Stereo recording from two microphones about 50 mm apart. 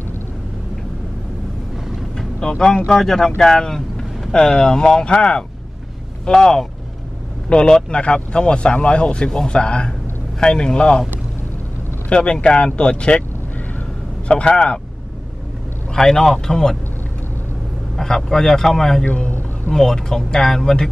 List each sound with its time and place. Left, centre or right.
2.4 s speech: centre
12.1 s speech: left
14.2 s speech: left
15.9 s speech: centre
17.9 s speech: centre
19.0 s speech: left
19.7 s speech: centre